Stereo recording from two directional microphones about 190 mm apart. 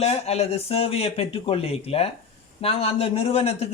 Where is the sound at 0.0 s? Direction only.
35° left (ahead or behind).